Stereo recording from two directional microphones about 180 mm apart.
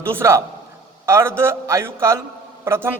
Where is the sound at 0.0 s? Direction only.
15° right (ahead or behind).